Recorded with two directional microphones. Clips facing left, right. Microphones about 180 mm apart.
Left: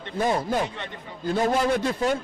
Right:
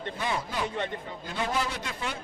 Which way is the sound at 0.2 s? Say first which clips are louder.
Left 9 dB; 45° left (ahead or behind).